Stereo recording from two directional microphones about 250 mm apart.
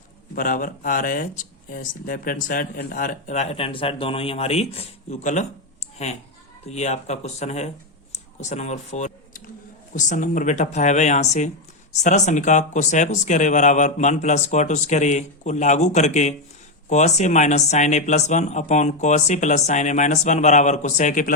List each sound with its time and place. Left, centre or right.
0.3 s speech: left